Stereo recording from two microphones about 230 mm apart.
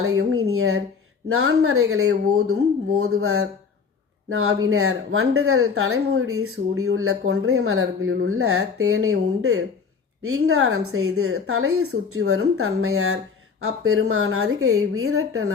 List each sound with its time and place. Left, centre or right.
0.0 s a woman's voice: right